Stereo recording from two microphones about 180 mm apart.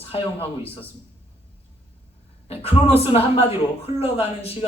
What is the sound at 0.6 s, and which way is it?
Speech, 10° left (ahead or behind).